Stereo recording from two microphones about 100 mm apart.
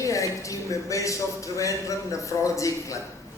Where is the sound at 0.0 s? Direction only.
30° left (ahead or behind).